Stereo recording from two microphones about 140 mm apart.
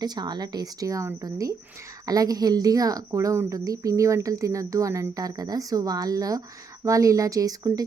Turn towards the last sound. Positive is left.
turn(degrees=-25)  # may be behind; listen again after turning